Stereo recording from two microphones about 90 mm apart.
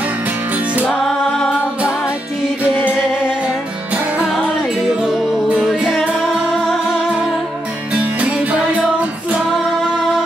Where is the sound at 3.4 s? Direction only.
10° right (ahead or behind).